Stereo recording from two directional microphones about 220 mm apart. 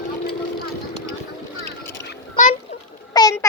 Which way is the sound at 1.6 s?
50° left (ahead or behind).